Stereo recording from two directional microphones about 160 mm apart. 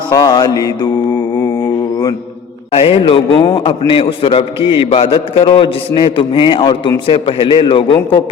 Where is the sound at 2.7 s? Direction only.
35° left (ahead or behind).